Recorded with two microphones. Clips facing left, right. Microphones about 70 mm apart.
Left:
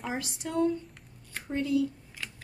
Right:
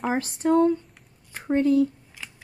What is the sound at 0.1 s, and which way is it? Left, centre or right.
Speech, right.